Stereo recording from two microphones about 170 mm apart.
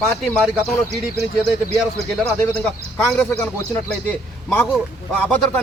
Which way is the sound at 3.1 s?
5° left (ahead or behind).